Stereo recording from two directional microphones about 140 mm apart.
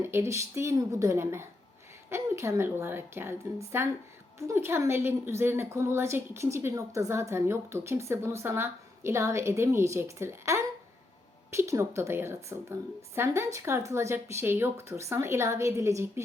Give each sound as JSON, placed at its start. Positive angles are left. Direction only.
{"t": 0.0, "sound": "a woman's voice", "side_deg": -20}